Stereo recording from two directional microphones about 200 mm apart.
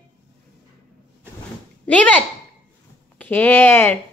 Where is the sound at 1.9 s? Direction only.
5° left (ahead or behind).